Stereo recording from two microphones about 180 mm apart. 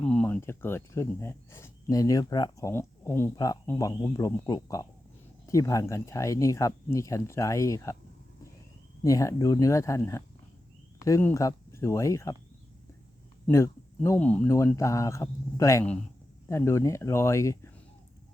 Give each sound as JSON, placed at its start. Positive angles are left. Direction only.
{"t": 0.0, "sound": "speech", "side_deg": 5}
{"t": 9.0, "sound": "speech", "side_deg": 20}
{"t": 13.5, "sound": "speech", "side_deg": 15}